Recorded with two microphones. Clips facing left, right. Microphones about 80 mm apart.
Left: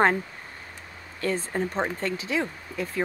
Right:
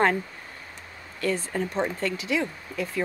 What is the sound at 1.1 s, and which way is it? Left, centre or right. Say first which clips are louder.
Speech: even; left.